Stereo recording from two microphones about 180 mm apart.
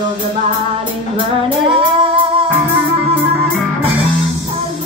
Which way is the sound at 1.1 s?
30° right (ahead or behind).